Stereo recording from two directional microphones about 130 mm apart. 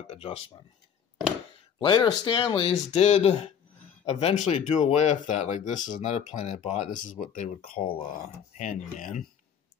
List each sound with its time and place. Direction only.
0.1 s speech: 50° left (ahead or behind)
1.8 s speech: 35° left (ahead or behind)
2.9 s speech: 55° left (ahead or behind); by 7.8 s 75° left (ahead or behind)
7.8 s speech: 45° left (ahead or behind)
8.5 s speech: 75° left (ahead or behind)